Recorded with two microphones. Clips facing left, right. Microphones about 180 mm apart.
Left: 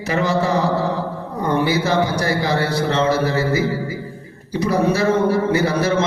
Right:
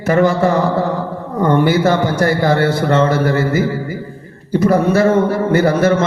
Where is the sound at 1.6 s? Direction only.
50° right (ahead or behind).